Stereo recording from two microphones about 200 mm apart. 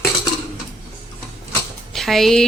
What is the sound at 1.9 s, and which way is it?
Speech, centre (ahead or behind).